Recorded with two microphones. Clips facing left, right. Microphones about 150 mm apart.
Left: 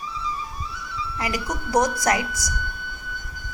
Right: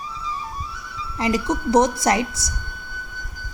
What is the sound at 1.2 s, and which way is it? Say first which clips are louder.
A woman's voice: right 8 dB; 25° right (ahead or behind).